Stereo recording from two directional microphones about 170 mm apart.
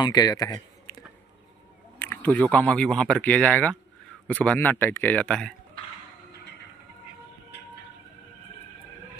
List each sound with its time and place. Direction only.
0.0 s speech: 25° left (ahead or behind)
2.0 s speech: 10° left (ahead or behind)